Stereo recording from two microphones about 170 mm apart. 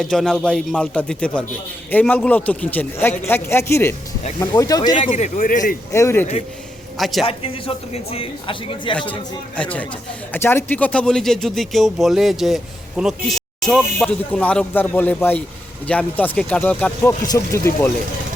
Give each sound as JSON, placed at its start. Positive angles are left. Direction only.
{"t": 0.0, "sound": "a man's voice", "side_deg": 0}
{"t": 5.0, "sound": "a man's voice", "side_deg": 45}
{"t": 5.9, "sound": "a man's voice", "side_deg": 15}
{"t": 7.0, "sound": "speech", "side_deg": 0}
{"t": 7.3, "sound": "speech", "side_deg": 30}
{"t": 9.6, "sound": "a man's voice", "side_deg": 10}